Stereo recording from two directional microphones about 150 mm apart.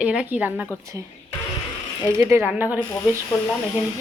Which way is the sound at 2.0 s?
15° right (ahead or behind).